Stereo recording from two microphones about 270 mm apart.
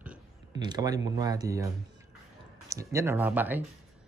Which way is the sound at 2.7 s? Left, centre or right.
Centre.